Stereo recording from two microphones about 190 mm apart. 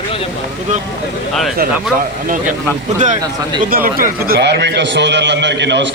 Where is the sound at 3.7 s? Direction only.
50° right (ahead or behind).